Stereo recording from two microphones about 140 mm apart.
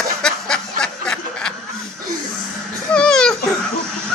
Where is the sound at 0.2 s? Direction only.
5° left (ahead or behind).